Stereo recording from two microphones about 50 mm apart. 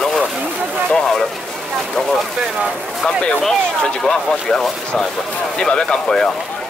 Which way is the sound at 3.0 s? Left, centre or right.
Centre.